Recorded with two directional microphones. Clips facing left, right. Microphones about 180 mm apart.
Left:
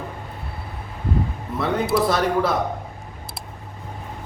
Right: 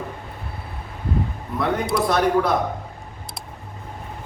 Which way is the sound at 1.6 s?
Centre (ahead or behind).